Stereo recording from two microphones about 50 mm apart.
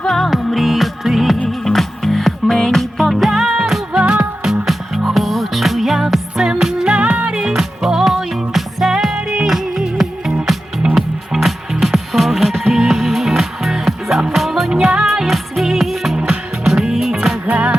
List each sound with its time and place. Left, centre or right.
0.1 s music: centre
1.5 s music: centre
4.6 s music: centre
6.3 s music: centre
17.4 s music: right